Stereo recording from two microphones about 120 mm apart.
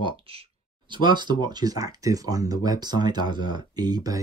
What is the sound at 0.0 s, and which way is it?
Speech, 50° right (ahead or behind).